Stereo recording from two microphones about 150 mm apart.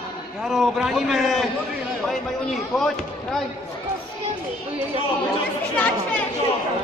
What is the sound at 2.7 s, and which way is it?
Speech, centre (ahead or behind).